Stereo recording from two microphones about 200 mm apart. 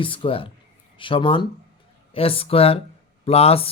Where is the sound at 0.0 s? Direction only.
25° left (ahead or behind).